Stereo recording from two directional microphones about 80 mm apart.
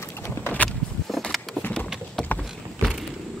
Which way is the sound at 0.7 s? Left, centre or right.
Centre.